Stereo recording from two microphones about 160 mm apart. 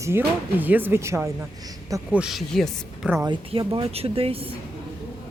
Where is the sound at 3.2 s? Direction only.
30° right (ahead or behind).